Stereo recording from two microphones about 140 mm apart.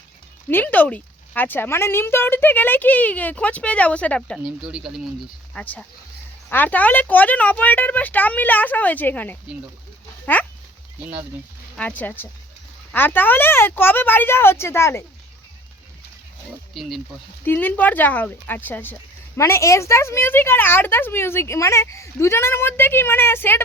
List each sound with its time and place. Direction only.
0.4 s speech: 10° left (ahead or behind)
4.4 s speech: 5° right (ahead or behind)
6.5 s speech: 10° left (ahead or behind)
11.8 s speech: 10° left (ahead or behind)
17.4 s speech: 15° left (ahead or behind)